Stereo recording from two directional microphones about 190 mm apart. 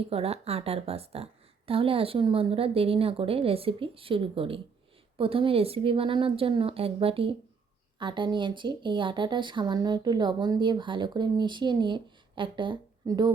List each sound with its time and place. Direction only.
0.1 s speech: 30° right (ahead or behind)